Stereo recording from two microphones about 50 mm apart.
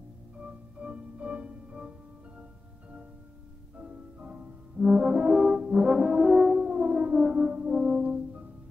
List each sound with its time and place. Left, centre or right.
0.4 s music: right
3.8 s french horn: right
5.3 s french horn: centre